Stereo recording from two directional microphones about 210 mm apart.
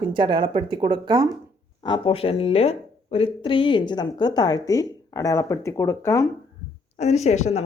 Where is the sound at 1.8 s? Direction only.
25° left (ahead or behind).